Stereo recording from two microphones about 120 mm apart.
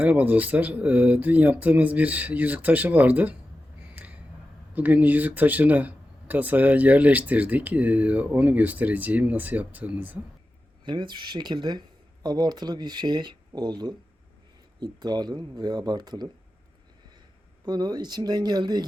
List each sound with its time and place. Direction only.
0.0 s speech: 15° right (ahead or behind)
3.9 s a sound: 10° right (ahead or behind)
4.7 s speech: 15° right (ahead or behind)
10.8 s speech: 40° right (ahead or behind)
17.7 s speech: 35° right (ahead or behind)